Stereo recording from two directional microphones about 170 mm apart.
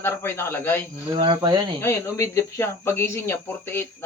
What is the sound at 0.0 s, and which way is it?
Speech, 15° left (ahead or behind).